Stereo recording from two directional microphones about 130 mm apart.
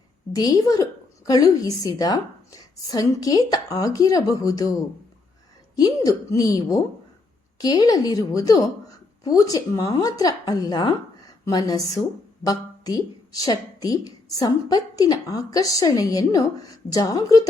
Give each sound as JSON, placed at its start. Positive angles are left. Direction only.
{"t": 0.3, "sound": "speech", "side_deg": 30}
{"t": 5.7, "sound": "speech", "side_deg": 30}